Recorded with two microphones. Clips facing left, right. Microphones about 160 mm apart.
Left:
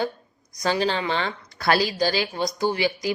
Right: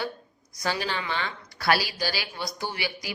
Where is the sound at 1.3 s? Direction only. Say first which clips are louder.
Left 3 dB; 50° left (ahead or behind).